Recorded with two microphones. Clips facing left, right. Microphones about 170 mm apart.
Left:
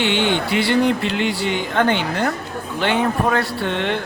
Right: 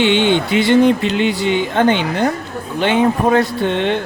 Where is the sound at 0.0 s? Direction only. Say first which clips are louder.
Right 5 dB; 20° right (ahead or behind).